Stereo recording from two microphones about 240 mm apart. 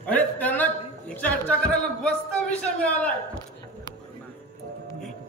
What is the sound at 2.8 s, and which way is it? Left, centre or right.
Speech, centre.